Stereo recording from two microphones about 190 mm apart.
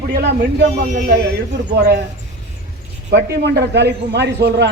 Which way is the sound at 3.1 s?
65° right (ahead or behind).